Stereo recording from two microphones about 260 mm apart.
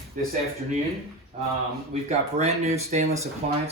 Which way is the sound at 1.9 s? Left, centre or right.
Right.